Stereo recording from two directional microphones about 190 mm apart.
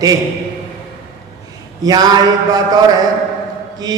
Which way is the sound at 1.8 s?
20° right (ahead or behind).